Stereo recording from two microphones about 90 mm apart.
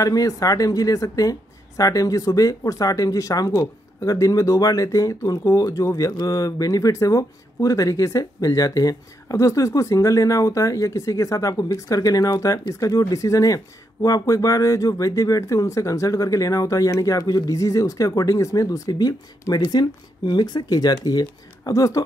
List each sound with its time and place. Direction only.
0.0 s speech: 40° left (ahead or behind)